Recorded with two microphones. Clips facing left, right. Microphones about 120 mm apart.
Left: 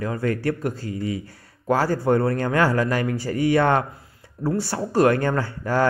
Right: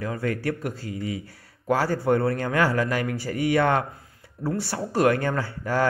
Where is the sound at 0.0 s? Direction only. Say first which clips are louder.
Left 3 dB; 40° left (ahead or behind).